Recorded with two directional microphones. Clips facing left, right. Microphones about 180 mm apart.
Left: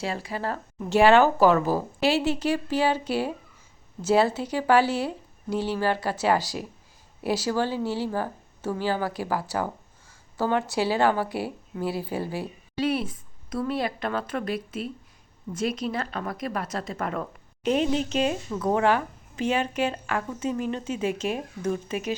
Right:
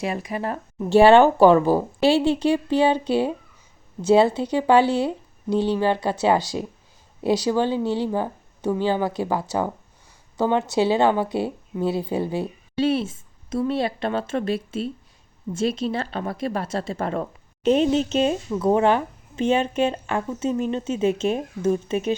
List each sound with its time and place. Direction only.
0.0 s a woman's voice: 15° right (ahead or behind)
0.9 s a woman's voice: 30° right (ahead or behind)